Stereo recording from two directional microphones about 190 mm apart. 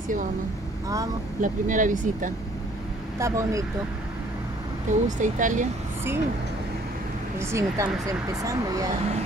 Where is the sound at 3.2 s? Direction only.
15° right (ahead or behind).